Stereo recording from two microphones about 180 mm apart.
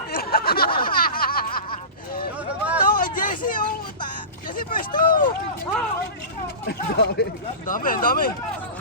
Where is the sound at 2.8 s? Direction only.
50° left (ahead or behind).